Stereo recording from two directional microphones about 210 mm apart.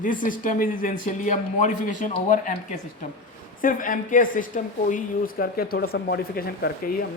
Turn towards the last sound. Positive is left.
turn(degrees=45)  # may be behind; listen again after turning